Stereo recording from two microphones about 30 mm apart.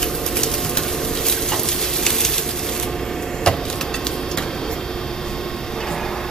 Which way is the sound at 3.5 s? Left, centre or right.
Left.